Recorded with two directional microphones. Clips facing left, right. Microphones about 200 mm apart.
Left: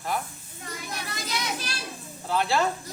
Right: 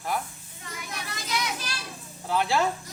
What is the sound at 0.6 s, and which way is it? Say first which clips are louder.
Children playing: left 2 dB; 35° left (ahead or behind).